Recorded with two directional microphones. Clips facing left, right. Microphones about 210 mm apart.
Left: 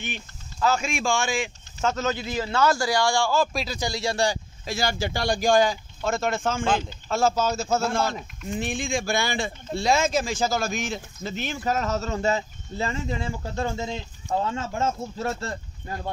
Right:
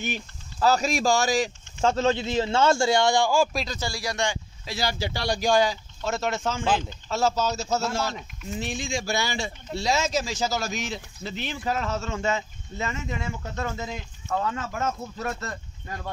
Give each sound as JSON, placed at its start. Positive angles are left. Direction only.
{"t": 0.0, "sound": "speech", "side_deg": -40}
{"t": 3.5, "sound": "speech", "side_deg": 10}
{"t": 4.6, "sound": "speech", "side_deg": 50}